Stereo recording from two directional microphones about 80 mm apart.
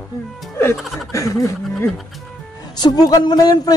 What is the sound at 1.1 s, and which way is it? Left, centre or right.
Speech, left.